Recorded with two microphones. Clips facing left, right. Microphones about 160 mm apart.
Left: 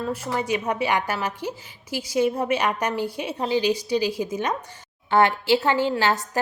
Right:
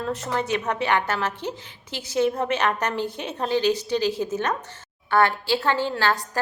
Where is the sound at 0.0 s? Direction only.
10° left (ahead or behind).